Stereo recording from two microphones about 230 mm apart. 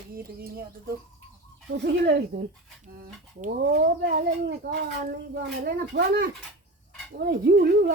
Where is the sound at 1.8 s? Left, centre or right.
Right.